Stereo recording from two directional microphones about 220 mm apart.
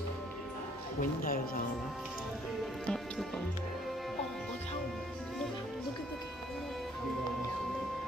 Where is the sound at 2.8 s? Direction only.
Centre (ahead or behind).